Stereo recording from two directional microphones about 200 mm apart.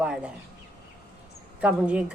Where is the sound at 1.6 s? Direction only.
5° right (ahead or behind).